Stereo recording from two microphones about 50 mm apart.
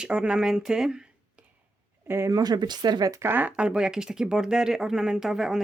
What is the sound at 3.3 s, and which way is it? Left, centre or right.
Speech, right.